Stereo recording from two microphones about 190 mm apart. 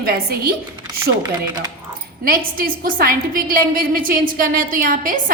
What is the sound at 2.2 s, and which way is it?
A woman's voice, 50° right (ahead or behind).